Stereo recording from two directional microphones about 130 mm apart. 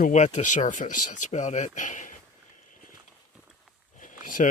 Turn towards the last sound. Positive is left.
turn(degrees=85)